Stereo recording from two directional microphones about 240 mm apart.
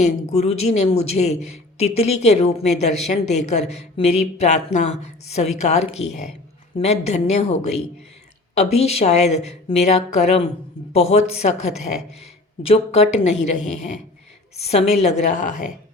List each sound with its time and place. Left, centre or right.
0.0 s speech: left